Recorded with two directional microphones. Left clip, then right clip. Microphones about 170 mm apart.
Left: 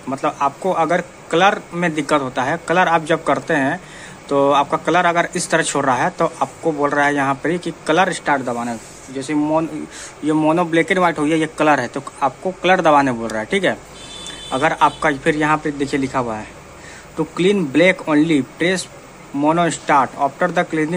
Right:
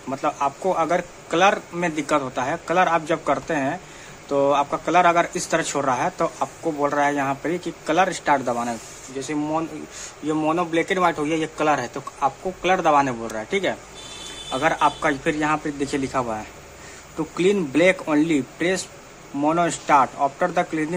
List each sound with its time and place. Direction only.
0.1 s speech: centre (ahead or behind)
9.2 s a man's voice: 10° left (ahead or behind)